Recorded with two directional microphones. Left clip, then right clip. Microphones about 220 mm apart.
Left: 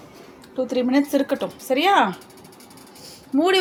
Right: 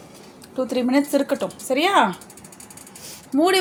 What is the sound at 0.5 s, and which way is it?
A woman's voice, 10° right (ahead or behind).